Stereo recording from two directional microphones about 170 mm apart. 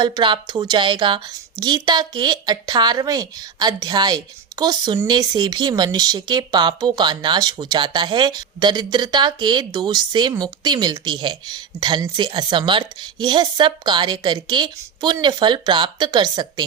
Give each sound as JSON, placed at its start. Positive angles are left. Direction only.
{"t": 0.0, "sound": "a woman's voice", "side_deg": -25}